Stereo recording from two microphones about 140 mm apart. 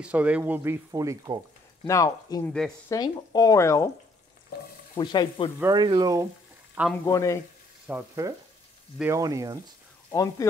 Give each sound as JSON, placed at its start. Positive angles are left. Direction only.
{"t": 0.0, "sound": "speech", "side_deg": -10}
{"t": 1.9, "sound": "speech", "side_deg": 20}
{"t": 2.4, "sound": "frying", "side_deg": 5}
{"t": 2.9, "sound": "speech", "side_deg": 25}
{"t": 4.9, "sound": "frying", "side_deg": 30}
{"t": 5.6, "sound": "speech", "side_deg": -30}
{"t": 7.1, "sound": "speech", "side_deg": 25}
{"t": 7.9, "sound": "speech", "side_deg": -10}
{"t": 9.0, "sound": "speech", "side_deg": -20}
{"t": 10.1, "sound": "speech", "side_deg": 25}